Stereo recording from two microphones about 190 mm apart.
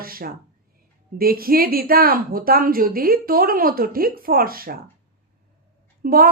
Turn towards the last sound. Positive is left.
turn(degrees=-50)  # may be behind; listen again after turning